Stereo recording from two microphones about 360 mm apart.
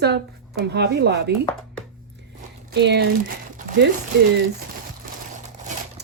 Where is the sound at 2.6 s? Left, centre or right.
Right.